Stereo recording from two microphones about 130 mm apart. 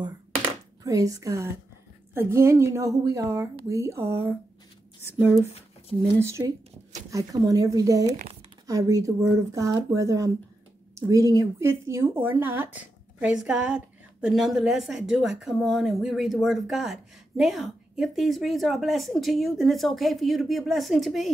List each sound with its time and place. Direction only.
0.8 s a woman's voice: 25° right (ahead or behind)
6.1 s a woman's voice: 20° right (ahead or behind)
8.1 s speech: 60° right (ahead or behind)
8.6 s a woman's voice: 25° right (ahead or behind); by 21.3 s centre (ahead or behind)